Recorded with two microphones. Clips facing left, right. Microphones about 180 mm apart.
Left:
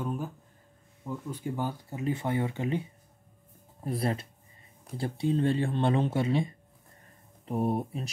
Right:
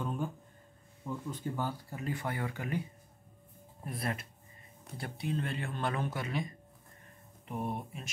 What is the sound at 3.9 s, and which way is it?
Speech, 30° left (ahead or behind).